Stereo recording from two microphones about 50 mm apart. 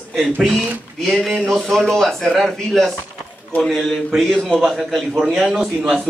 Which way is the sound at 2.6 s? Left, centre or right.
Centre.